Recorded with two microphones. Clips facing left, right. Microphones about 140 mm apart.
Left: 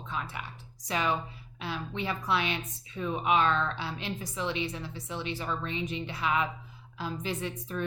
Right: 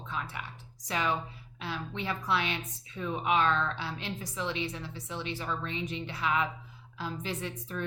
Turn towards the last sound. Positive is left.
turn(degrees=15)  # may be behind; listen again after turning